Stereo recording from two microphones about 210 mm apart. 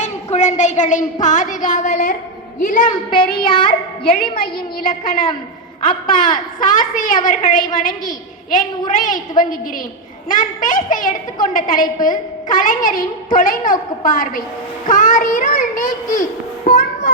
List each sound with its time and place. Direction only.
0.0 s child singing: 35° left (ahead or behind)
2.6 s a woman's voice: 40° left (ahead or behind)
3.1 s child singing: 25° left (ahead or behind)
4.1 s a woman's voice: 45° left (ahead or behind)
16.7 s music: 40° left (ahead or behind)